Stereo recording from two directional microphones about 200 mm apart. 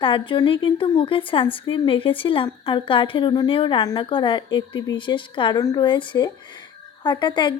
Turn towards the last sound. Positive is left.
turn(degrees=20)  # may be behind; listen again after turning